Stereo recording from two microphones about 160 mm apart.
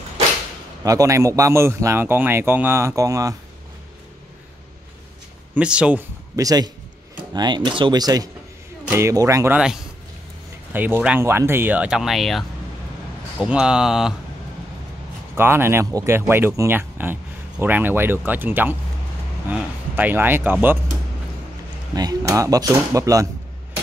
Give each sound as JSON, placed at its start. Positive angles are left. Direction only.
{"t": 0.8, "sound": "speech", "side_deg": -20}
{"t": 5.5, "sound": "speech", "side_deg": -5}
{"t": 6.3, "sound": "speech", "side_deg": -25}
{"t": 10.7, "sound": "speech", "side_deg": -10}
{"t": 15.3, "sound": "speech", "side_deg": -15}
{"t": 21.9, "sound": "speech", "side_deg": -20}